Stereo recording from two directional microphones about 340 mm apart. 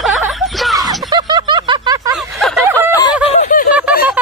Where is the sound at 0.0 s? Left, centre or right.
Centre.